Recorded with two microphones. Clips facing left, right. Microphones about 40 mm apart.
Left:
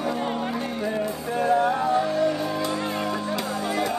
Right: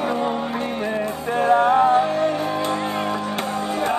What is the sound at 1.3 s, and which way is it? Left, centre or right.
Music, right.